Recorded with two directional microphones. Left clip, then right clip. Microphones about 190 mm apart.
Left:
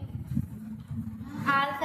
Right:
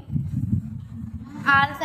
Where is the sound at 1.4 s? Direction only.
65° right (ahead or behind).